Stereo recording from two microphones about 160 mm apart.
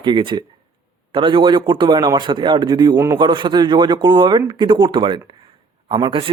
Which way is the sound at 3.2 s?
30° right (ahead or behind).